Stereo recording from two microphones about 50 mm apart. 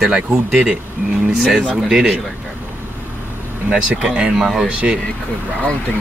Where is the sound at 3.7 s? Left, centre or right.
Centre.